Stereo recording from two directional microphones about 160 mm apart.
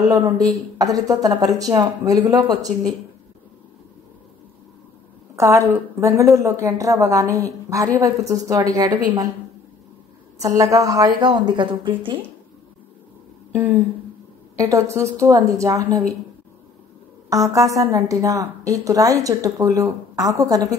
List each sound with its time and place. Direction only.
0.0 s a woman's voice: 20° right (ahead or behind)
5.3 s a woman's voice: 20° right (ahead or behind)
10.4 s a woman's voice: 20° right (ahead or behind)
14.6 s a woman's voice: 20° right (ahead or behind)
17.3 s a woman's voice: 20° right (ahead or behind)